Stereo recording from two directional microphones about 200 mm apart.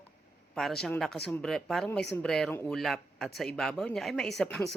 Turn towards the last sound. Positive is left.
turn(degrees=0)  # may be behind; listen again after turning